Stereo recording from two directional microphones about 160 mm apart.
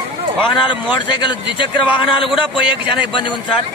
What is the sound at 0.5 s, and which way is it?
A man's voice, 30° left (ahead or behind).